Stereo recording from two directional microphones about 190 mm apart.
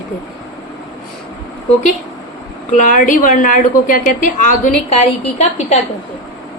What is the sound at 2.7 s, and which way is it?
A woman's voice, 40° left (ahead or behind).